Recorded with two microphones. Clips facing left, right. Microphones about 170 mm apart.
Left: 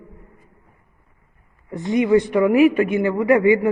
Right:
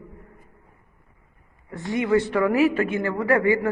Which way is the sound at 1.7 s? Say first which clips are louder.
Left 5 dB; 20° left (ahead or behind).